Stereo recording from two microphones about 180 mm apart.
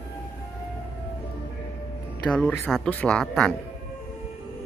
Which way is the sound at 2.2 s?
10° left (ahead or behind).